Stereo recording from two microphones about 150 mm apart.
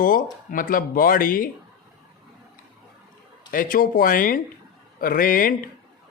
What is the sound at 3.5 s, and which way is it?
Speech, 70° left (ahead or behind).